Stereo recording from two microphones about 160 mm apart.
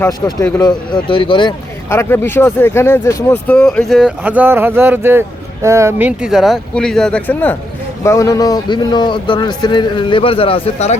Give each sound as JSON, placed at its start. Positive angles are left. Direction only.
{"t": 0.6, "sound": "a man's voice", "side_deg": 30}
{"t": 1.9, "sound": "a man's voice", "side_deg": 15}